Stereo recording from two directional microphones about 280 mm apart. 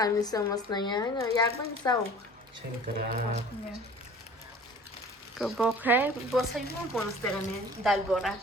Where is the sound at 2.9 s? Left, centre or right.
Right.